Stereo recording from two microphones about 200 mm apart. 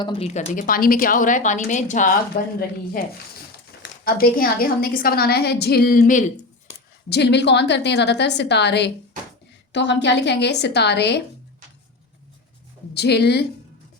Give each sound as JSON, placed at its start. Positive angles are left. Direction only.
{"t": 0.0, "sound": "a woman's voice", "side_deg": 25}
{"t": 0.3, "sound": "a woman's voice", "side_deg": 35}
{"t": 7.1, "sound": "a woman's voice", "side_deg": 60}
{"t": 12.9, "sound": "a woman's voice", "side_deg": 55}